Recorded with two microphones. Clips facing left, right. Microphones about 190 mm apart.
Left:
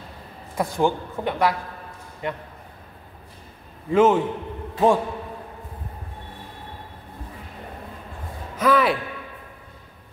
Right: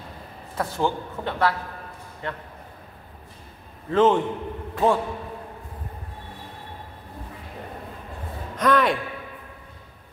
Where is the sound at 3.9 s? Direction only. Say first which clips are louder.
Left 2 dB; 10° left (ahead or behind).